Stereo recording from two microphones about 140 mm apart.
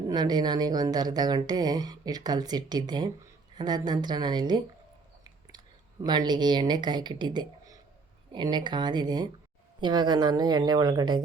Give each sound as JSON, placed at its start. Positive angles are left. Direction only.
{"t": 0.1, "sound": "a woman's voice", "side_deg": -30}